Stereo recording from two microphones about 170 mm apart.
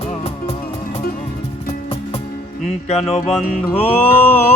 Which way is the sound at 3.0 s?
Centre (ahead or behind).